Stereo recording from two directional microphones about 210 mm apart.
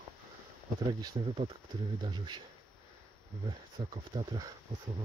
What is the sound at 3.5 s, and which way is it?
Speech, 20° right (ahead or behind).